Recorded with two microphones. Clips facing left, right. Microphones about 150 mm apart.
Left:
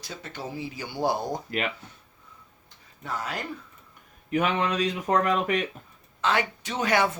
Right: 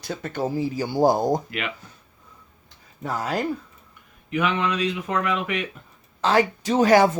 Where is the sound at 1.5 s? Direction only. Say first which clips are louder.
Left 1 dB; 40° left (ahead or behind).